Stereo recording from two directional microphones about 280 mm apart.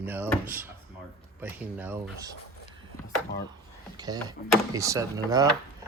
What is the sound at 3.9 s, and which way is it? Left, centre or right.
Speech, centre.